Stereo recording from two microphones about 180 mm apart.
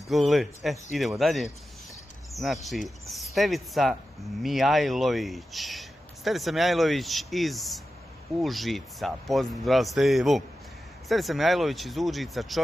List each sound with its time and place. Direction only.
0.1 s speech: centre (ahead or behind)